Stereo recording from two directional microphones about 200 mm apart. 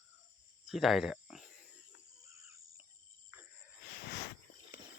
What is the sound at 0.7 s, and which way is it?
Cricket, centre (ahead or behind).